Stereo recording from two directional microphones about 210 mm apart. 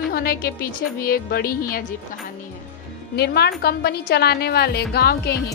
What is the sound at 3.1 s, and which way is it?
A woman's voice, 50° left (ahead or behind).